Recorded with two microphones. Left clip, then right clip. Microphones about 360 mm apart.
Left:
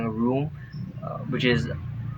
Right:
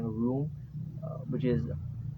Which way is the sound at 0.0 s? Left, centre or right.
Right.